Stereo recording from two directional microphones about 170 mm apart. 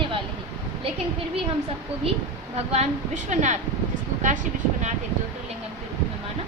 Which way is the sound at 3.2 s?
45° right (ahead or behind).